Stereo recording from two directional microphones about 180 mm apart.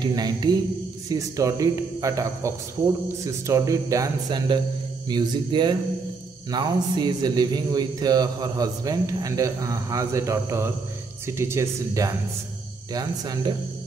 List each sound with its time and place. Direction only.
0.0 s a man's voice: 25° right (ahead or behind)